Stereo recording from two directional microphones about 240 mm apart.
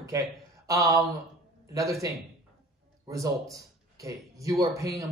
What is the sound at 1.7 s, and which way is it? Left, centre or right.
Speech, centre.